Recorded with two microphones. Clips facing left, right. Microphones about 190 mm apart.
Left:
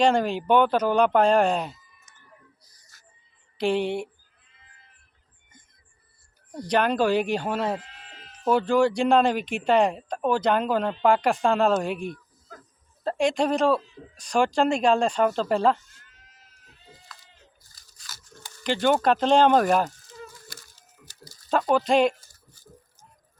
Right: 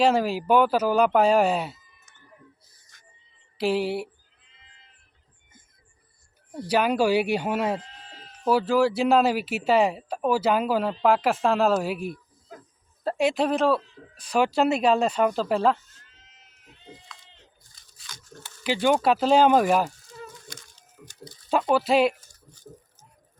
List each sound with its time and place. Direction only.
0.0 s speech: 5° right (ahead or behind)
2.9 s a sound: 5° left (ahead or behind)
3.6 s speech: 5° right (ahead or behind)
6.5 s speech: 5° right (ahead or behind)
7.8 s sheep: 35° right (ahead or behind)
8.4 s speech: 5° right (ahead or behind)
16.0 s goat: 25° right (ahead or behind)
17.2 s a sound: 25° right (ahead or behind)
17.7 s a sound: centre (ahead or behind)
18.6 s speech: 5° right (ahead or behind)
20.5 s a sound: 5° left (ahead or behind)
21.2 s speech: centre (ahead or behind)